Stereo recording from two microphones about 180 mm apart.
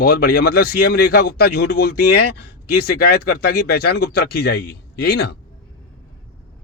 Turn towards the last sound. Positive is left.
turn(degrees=65)  # may be behind; listen again after turning